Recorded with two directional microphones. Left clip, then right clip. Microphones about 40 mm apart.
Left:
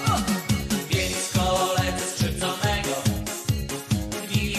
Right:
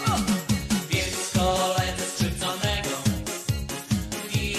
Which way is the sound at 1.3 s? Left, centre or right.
Left.